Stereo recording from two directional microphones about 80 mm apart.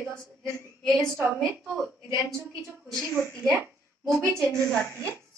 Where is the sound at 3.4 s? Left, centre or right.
Right.